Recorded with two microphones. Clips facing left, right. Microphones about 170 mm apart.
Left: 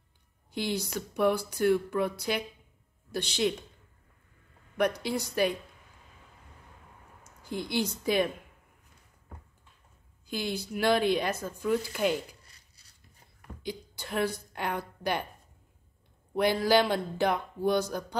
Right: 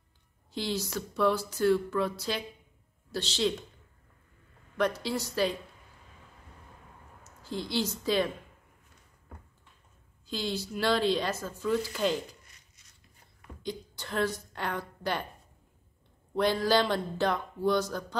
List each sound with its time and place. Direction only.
0.7 s speech: 15° left (ahead or behind)
4.7 s speech: 15° left (ahead or behind)
7.4 s speech: 15° left (ahead or behind)
10.2 s speech: 10° left (ahead or behind)
12.4 s a sound: 35° left (ahead or behind)
13.6 s a woman's voice: 10° left (ahead or behind)
16.3 s speech: 10° left (ahead or behind)